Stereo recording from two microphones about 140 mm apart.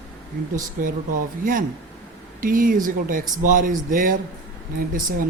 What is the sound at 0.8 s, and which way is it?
Speech, 80° right.